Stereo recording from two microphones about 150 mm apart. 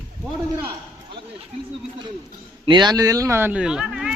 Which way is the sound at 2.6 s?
30° right (ahead or behind).